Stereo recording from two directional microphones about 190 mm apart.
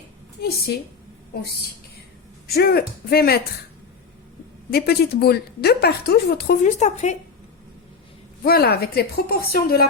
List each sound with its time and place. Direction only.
0.4 s a woman's voice: 55° left (ahead or behind)
2.6 s a woman's voice: 55° left (ahead or behind)
4.7 s a woman's voice: 55° left (ahead or behind); by 7.2 s 35° left (ahead or behind)
8.4 s a woman's voice: 55° left (ahead or behind)